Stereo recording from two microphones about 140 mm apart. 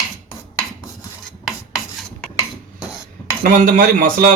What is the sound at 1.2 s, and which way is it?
Filing, 5° right (ahead or behind).